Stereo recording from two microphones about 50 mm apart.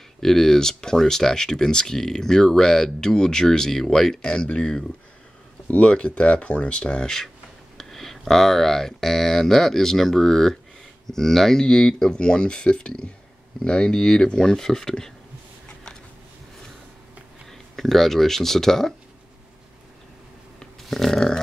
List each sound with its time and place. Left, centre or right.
0.2 s speech: centre
7.7 s speech: centre
17.5 s speech: centre
20.5 s a sound: centre